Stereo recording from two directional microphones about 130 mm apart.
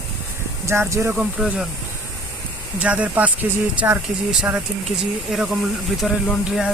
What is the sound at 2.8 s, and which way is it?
Speech, 10° right (ahead or behind).